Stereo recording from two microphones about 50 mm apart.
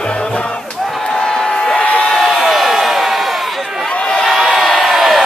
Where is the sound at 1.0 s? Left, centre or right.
Centre.